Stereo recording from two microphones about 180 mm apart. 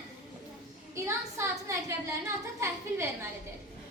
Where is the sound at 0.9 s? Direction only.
15° right (ahead or behind).